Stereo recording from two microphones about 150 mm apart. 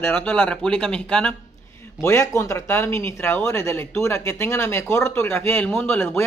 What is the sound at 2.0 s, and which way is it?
Speech, 20° left (ahead or behind).